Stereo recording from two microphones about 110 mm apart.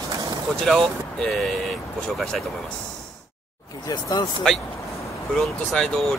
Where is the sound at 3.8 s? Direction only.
35° left (ahead or behind).